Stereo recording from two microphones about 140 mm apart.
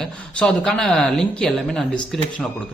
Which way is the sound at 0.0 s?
5° left (ahead or behind).